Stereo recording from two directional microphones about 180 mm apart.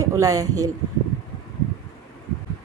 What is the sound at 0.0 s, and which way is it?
Speech, 15° right (ahead or behind).